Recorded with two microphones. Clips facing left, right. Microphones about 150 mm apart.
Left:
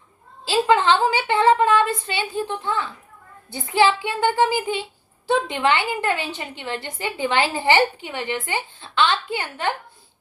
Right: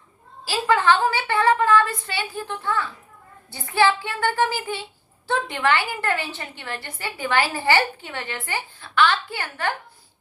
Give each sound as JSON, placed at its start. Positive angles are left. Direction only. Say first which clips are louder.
{"t": 0.4, "sound": "a woman's voice", "louder": "left 2 dB", "side_deg": 20}